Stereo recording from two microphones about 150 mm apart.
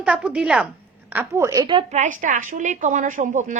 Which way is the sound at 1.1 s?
15° right (ahead or behind).